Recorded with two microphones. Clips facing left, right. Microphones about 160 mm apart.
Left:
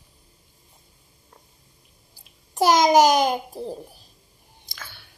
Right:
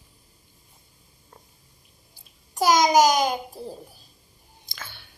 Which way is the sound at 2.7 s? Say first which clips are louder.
Left 2 dB; 35° left (ahead or behind).